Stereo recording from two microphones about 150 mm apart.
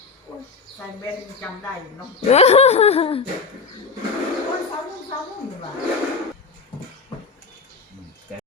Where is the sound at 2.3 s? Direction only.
45° left (ahead or behind).